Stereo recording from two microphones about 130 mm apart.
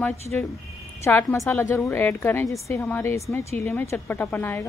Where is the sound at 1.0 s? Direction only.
20° left (ahead or behind).